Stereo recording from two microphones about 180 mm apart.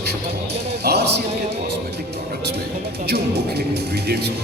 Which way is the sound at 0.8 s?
65° right (ahead or behind).